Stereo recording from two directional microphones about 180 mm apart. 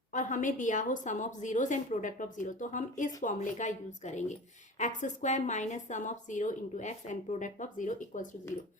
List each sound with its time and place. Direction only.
0.1 s speech: 45° left (ahead or behind)